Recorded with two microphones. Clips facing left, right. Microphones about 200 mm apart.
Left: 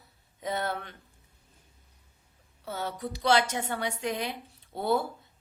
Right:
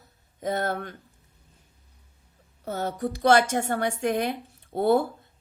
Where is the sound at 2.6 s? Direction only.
45° right (ahead or behind).